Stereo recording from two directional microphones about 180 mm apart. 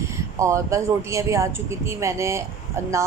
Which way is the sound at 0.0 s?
15° right (ahead or behind).